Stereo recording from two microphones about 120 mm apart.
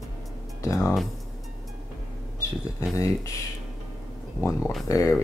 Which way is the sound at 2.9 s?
25° left (ahead or behind).